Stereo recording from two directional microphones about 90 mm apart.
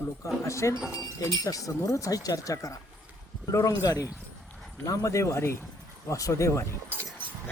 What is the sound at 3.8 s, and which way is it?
Speech, 45° left (ahead or behind).